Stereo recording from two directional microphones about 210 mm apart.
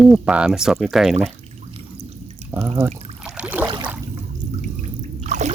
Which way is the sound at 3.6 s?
20° right (ahead or behind).